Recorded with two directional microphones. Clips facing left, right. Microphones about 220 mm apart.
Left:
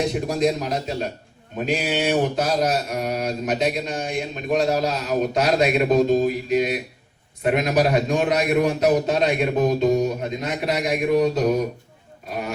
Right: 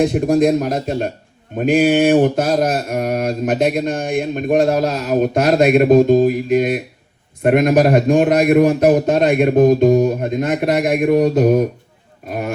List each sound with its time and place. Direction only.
0.0 s mantra: 50° right (ahead or behind)